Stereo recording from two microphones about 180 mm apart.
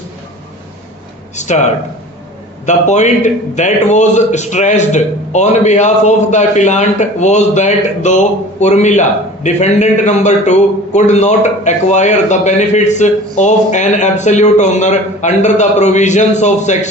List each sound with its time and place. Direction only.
1.4 s a man's voice: 40° left (ahead or behind)
2.6 s a man's voice: 40° left (ahead or behind)